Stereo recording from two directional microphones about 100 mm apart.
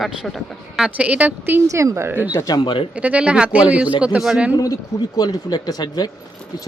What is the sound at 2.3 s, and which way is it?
Speech, 35° left (ahead or behind).